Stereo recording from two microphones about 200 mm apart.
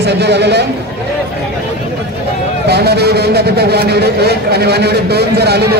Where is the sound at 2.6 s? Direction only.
55° right (ahead or behind).